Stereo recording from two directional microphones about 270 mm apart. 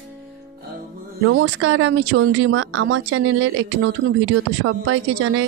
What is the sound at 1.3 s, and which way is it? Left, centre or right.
A woman's voice, right.